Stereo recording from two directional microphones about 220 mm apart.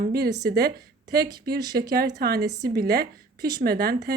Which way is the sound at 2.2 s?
45° right (ahead or behind).